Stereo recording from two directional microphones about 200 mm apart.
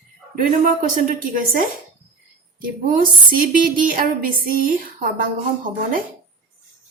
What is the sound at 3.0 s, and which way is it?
A woman's voice, 45° right (ahead or behind).